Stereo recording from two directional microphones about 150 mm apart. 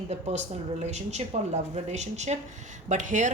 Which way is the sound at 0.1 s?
50° right (ahead or behind).